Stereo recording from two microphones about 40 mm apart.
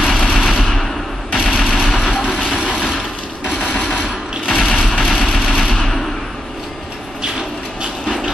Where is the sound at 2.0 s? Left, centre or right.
Left.